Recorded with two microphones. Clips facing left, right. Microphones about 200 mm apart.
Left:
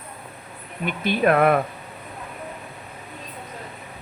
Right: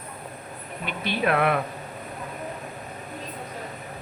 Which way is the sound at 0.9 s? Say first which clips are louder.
Left 5 dB; 50° left (ahead or behind).